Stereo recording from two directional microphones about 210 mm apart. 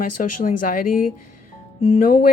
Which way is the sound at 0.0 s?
40° left (ahead or behind).